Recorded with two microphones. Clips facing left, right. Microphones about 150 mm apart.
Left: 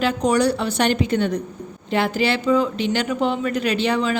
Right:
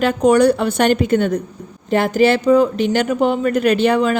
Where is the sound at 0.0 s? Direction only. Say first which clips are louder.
Right 6 dB; 50° right (ahead or behind).